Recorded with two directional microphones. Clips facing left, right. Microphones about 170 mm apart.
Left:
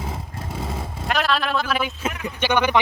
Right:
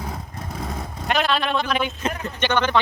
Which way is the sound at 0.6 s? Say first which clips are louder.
Even; 5° left (ahead or behind).